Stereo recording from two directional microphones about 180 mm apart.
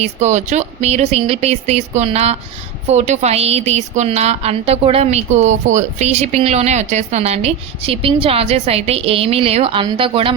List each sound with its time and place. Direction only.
0.0 s a woman's voice: 40° right (ahead or behind)